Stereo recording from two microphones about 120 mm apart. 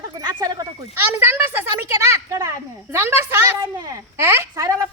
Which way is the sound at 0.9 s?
15° right (ahead or behind).